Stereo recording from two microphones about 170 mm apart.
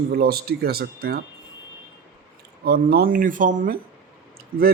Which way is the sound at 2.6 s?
65° right (ahead or behind).